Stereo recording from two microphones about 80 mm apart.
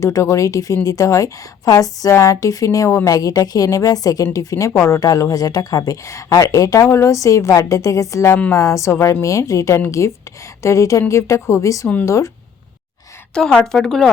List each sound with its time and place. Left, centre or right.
0.0 s a woman's voice: left
13.3 s speech: centre